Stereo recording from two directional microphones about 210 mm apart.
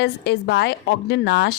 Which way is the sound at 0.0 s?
55° left (ahead or behind).